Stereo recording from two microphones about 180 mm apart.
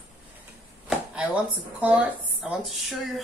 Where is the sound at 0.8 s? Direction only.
5° right (ahead or behind).